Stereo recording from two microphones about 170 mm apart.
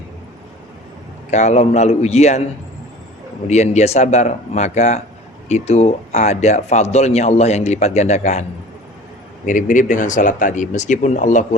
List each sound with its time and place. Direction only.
1.3 s speech: 40° left (ahead or behind)
3.4 s speech: 40° left (ahead or behind)
9.5 s speech: 50° left (ahead or behind)